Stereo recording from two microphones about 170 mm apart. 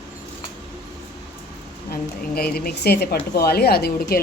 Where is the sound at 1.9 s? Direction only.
65° left (ahead or behind).